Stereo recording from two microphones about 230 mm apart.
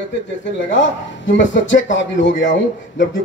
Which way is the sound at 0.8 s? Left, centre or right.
Left.